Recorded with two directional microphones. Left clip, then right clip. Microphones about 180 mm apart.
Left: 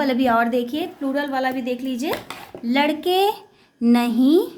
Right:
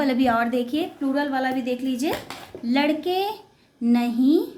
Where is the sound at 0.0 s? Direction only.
20° left (ahead or behind).